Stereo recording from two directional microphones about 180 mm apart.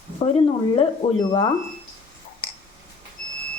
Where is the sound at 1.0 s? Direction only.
35° left (ahead or behind).